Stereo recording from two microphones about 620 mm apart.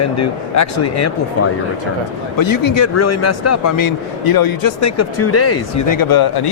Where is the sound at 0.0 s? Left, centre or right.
Left.